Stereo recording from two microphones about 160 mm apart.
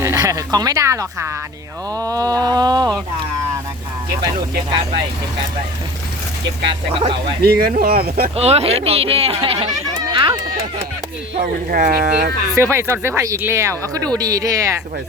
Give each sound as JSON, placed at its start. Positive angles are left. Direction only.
{"t": 0.0, "sound": "speech", "side_deg": -20}
{"t": 6.9, "sound": "speech", "side_deg": -35}
{"t": 7.4, "sound": "speech", "side_deg": -75}
{"t": 8.4, "sound": "speech", "side_deg": -40}
{"t": 9.6, "sound": "chatter", "side_deg": -25}
{"t": 11.7, "sound": "speech", "side_deg": -65}
{"t": 12.5, "sound": "speech", "side_deg": -15}